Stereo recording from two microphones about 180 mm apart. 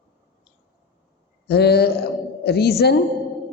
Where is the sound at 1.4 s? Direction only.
65° left (ahead or behind).